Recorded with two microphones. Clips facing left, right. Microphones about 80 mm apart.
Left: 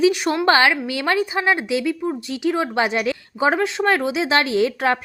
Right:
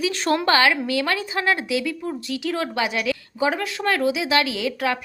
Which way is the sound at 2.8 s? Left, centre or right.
Left.